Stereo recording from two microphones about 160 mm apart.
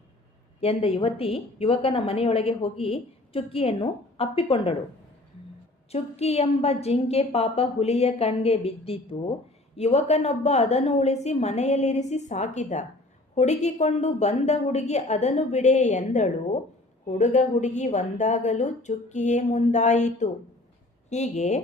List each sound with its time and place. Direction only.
0.6 s a woman's voice: 35° left (ahead or behind)
5.9 s a woman's voice: 40° left (ahead or behind)